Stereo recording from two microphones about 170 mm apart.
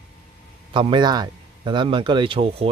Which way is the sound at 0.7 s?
25° right (ahead or behind).